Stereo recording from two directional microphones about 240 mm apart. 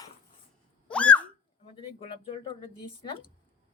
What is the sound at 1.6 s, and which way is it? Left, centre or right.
Speech, left.